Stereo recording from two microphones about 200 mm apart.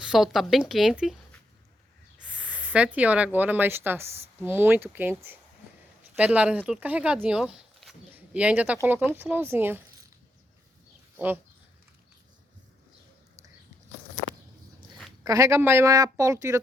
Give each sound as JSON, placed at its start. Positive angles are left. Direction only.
{"t": 0.0, "sound": "speech", "side_deg": 0}
{"t": 15.2, "sound": "speech", "side_deg": -15}